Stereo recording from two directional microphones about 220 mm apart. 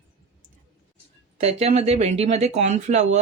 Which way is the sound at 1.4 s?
30° right (ahead or behind).